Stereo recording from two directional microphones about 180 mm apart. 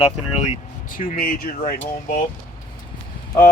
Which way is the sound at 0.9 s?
50° left (ahead or behind).